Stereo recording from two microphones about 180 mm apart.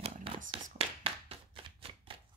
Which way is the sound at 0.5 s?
30° right (ahead or behind).